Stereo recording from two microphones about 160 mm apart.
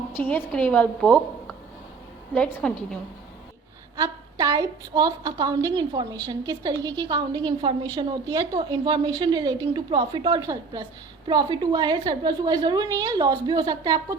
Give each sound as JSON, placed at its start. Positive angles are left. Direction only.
{"t": 0.4, "sound": "a woman's voice", "side_deg": 5}
{"t": 2.3, "sound": "a woman's voice", "side_deg": 5}
{"t": 3.9, "sound": "a woman's voice", "side_deg": -25}